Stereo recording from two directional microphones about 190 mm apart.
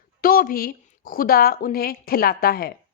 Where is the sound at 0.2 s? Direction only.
50° left (ahead or behind).